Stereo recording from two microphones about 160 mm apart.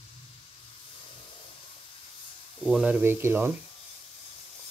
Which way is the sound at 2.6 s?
5° right (ahead or behind).